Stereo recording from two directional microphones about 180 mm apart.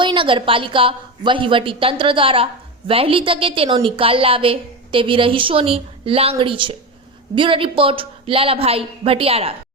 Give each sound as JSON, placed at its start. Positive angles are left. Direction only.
{"t": 0.0, "sound": "a woman's voice", "side_deg": -25}